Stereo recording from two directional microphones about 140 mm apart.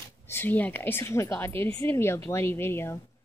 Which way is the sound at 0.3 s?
15° left (ahead or behind).